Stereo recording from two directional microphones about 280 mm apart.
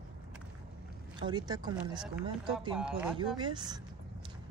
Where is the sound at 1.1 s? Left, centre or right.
Centre.